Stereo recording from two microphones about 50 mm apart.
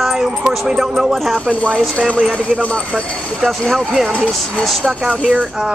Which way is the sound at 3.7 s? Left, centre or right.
Centre.